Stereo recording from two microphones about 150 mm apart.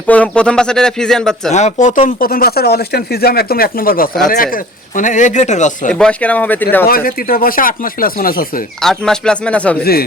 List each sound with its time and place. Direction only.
0.1 s speech: 10° left (ahead or behind)
1.5 s speech: 50° left (ahead or behind); by 4.1 s 75° left (ahead or behind)
4.5 s a man's voice: 60° left (ahead or behind)
5.9 s speech: 5° left (ahead or behind)
6.8 s speech: 75° left (ahead or behind)
8.8 s speech: 5° left (ahead or behind)
9.8 s speech: 90° left